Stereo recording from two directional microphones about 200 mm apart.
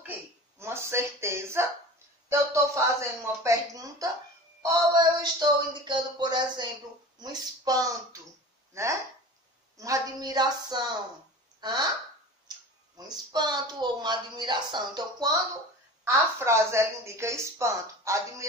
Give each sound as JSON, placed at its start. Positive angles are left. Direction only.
{"t": 0.0, "sound": "a sound", "side_deg": -10}
{"t": 2.2, "sound": "a woman's voice", "side_deg": -15}
{"t": 12.4, "sound": "a woman's voice", "side_deg": -20}